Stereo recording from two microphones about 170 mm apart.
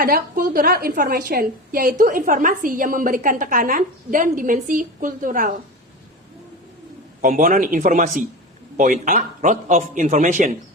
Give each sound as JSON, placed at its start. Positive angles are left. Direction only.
{"t": 0.0, "sound": "a woman's voice", "side_deg": -60}
{"t": 7.2, "sound": "a woman's voice", "side_deg": -55}